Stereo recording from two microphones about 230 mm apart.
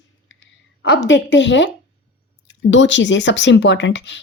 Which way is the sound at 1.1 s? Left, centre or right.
Left.